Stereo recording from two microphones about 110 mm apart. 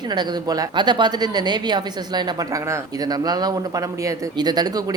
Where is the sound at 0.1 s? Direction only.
40° right (ahead or behind).